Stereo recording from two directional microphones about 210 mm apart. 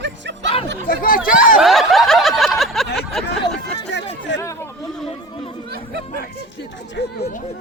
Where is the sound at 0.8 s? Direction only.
45° left (ahead or behind).